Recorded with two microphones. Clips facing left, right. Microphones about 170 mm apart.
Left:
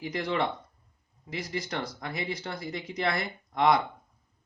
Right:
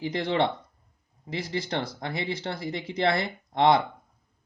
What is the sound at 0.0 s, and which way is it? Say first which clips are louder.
Speech: right 4 dB; 30° right (ahead or behind).